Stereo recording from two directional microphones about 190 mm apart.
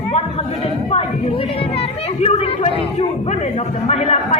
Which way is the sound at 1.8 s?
35° left (ahead or behind).